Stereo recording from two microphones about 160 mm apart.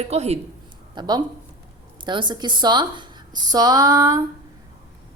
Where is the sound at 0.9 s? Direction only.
30° right (ahead or behind).